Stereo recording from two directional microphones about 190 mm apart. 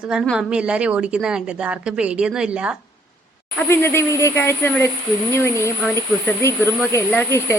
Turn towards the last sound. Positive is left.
turn(degrees=10)  # may be behind; listen again after turning